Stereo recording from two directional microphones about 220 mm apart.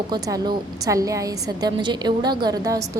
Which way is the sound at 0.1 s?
20° right (ahead or behind).